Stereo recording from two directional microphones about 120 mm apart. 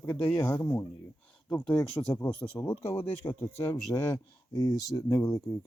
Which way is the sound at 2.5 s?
25° left (ahead or behind).